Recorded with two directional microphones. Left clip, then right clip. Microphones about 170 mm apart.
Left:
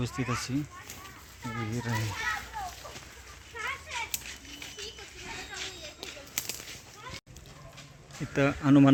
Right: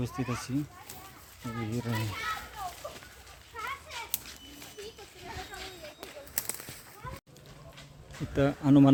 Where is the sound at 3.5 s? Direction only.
80° right.